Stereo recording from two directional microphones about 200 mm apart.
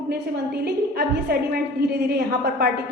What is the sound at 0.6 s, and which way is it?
A woman's voice, 50° right (ahead or behind).